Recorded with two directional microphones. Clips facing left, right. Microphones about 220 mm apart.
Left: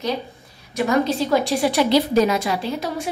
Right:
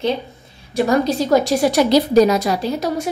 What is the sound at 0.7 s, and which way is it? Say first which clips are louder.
A woman's voice: right 3 dB; 40° right (ahead or behind).